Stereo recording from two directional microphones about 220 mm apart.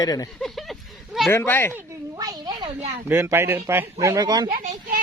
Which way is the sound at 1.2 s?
10° left (ahead or behind).